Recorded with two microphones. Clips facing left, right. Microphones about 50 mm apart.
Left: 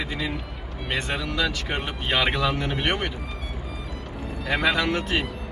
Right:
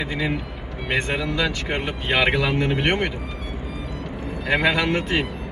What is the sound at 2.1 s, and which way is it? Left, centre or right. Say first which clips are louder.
Speech: right 3 dB; right.